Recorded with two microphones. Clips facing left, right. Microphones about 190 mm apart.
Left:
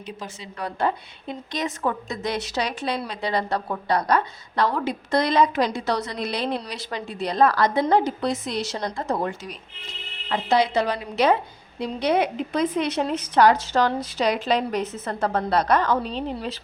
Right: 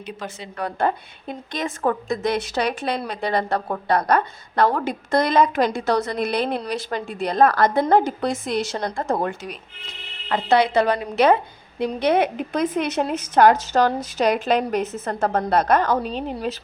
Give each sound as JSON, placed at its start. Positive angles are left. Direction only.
{"t": 0.2, "sound": "a woman's voice", "side_deg": -55}